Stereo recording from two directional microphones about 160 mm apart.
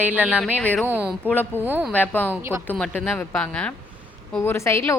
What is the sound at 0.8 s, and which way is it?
A woman's voice, 10° right (ahead or behind).